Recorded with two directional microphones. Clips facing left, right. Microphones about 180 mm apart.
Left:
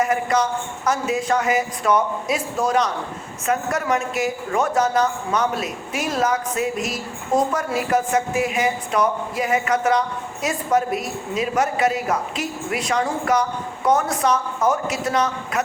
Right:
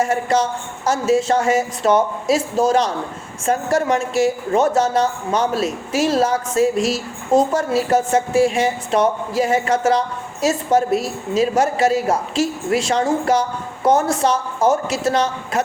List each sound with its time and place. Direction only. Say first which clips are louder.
0.0 s speech: right 2 dB; 30° right (ahead or behind)